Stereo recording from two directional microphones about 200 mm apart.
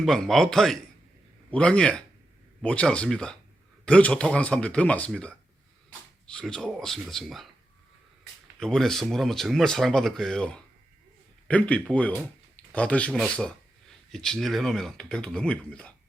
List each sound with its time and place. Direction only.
0.0 s speech: centre (ahead or behind)
8.5 s speech: centre (ahead or behind)